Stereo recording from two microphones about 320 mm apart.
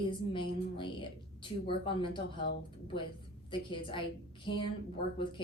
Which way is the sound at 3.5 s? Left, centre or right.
Centre.